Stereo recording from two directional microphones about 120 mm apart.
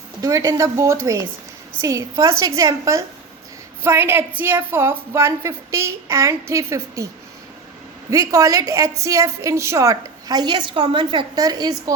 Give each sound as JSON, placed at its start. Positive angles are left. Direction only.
{"t": 0.2, "sound": "a woman's voice", "side_deg": -30}
{"t": 8.1, "sound": "a woman's voice", "side_deg": -30}